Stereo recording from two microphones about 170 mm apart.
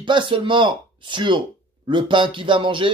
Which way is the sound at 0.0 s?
30° right (ahead or behind).